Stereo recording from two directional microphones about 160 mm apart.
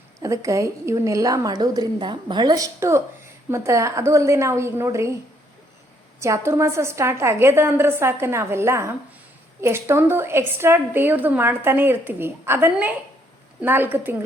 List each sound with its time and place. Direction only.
0.2 s a woman's voice: 20° right (ahead or behind)
6.1 s a woman's voice: 20° right (ahead or behind)